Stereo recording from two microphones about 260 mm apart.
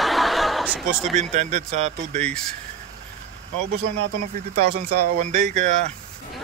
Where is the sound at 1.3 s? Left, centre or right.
Right.